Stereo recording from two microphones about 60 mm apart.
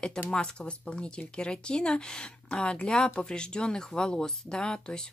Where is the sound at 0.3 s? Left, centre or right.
Centre.